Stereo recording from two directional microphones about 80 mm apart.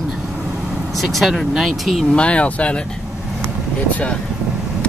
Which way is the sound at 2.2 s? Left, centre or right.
Centre.